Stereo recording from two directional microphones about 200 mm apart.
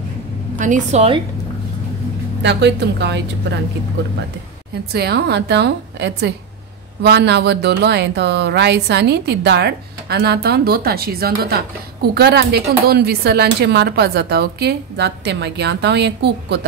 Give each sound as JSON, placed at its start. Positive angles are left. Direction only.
{"t": 0.6, "sound": "a woman's voice", "side_deg": -40}
{"t": 2.4, "sound": "speech", "side_deg": -60}
{"t": 4.9, "sound": "speech", "side_deg": -55}